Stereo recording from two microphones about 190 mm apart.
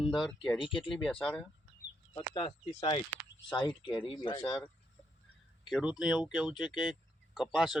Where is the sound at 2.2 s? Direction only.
25° left (ahead or behind).